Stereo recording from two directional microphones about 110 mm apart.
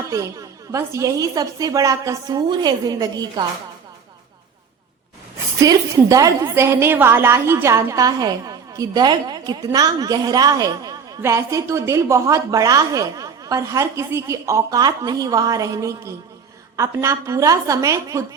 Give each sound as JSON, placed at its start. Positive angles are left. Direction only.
{"t": 0.7, "sound": "a woman's voice", "side_deg": -30}
{"t": 5.5, "sound": "a woman's voice", "side_deg": -30}